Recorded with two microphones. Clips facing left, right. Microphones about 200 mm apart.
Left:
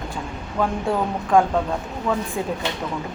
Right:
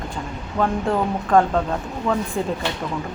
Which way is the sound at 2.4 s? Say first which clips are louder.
Right 2 dB; 10° left (ahead or behind).